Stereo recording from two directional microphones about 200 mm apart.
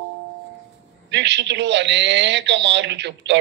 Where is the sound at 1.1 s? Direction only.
60° right (ahead or behind).